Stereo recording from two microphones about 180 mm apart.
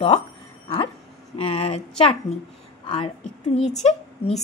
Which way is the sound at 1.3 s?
35° left (ahead or behind).